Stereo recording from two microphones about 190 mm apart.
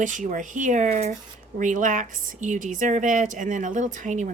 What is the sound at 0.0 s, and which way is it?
A woman's voice, 40° right (ahead or behind).